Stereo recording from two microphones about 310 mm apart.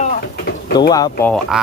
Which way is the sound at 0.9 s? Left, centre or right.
Centre.